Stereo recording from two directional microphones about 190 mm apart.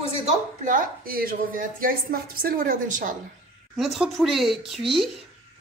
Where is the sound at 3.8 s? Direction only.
Centre (ahead or behind).